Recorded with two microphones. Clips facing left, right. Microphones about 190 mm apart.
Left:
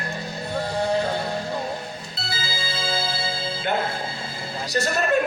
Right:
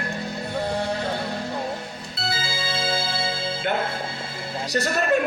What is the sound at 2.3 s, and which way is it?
Music, 55° right (ahead or behind).